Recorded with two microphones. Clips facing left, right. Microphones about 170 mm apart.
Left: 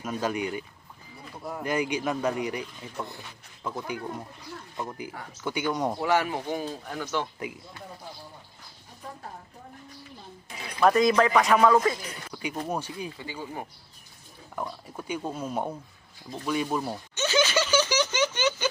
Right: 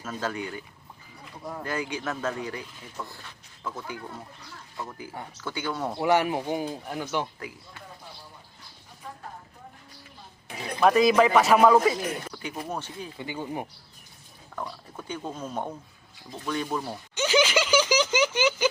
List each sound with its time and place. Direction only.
0.0 s speech: 15° left (ahead or behind)
1.6 s speech: 20° left (ahead or behind)
6.0 s speech: 15° right (ahead or behind)
10.8 s speech: 5° right (ahead or behind)
12.3 s speech: 15° left (ahead or behind)
13.1 s speech: 20° right (ahead or behind)
14.5 s speech: 10° left (ahead or behind)
17.2 s a sound: 10° right (ahead or behind)